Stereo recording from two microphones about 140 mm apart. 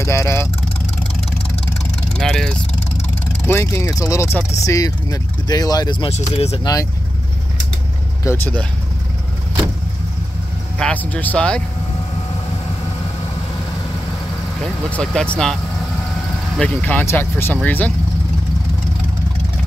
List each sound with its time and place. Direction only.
0.0 s speech: 20° left (ahead or behind)
2.1 s speech: 5° left (ahead or behind)
3.4 s speech: 20° left (ahead or behind)
6.0 s speech: 50° left (ahead or behind)
6.6 s speech: 25° left (ahead or behind)
8.3 s speech: 20° left (ahead or behind)
10.8 s speech: 10° left (ahead or behind)
14.9 s speech: 10° left (ahead or behind)
16.5 s speech: 10° left (ahead or behind)